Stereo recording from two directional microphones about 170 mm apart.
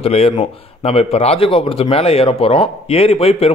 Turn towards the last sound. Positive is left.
turn(degrees=35)  # may be behind; listen again after turning